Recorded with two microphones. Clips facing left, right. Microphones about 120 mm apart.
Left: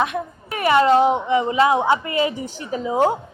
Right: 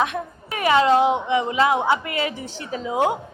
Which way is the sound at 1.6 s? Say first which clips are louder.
Left 2 dB; 15° left (ahead or behind).